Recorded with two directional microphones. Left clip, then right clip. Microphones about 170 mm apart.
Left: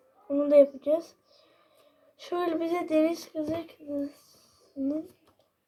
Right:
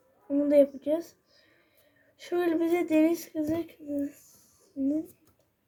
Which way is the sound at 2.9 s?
15° right (ahead or behind).